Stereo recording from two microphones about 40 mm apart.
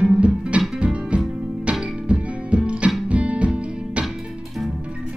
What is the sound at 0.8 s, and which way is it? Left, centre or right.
Music, right.